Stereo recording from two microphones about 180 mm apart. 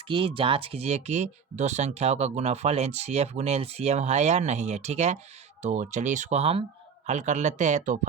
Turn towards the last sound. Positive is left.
turn(degrees=-45)  # may be behind; listen again after turning